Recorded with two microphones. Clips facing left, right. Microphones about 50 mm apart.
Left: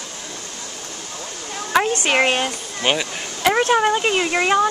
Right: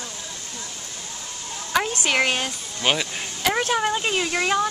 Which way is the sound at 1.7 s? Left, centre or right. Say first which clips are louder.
Left 5 dB; centre.